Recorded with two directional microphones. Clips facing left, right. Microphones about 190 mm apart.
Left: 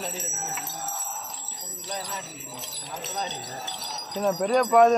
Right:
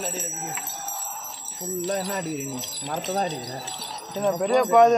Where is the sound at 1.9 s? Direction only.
55° right (ahead or behind).